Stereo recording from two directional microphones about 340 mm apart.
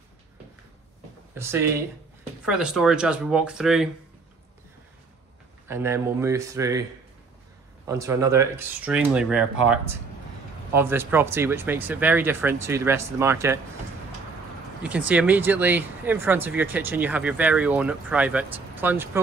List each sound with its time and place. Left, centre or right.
1.3 s speech: centre
5.7 s speech: centre
7.8 s speech: centre
14.8 s speech: centre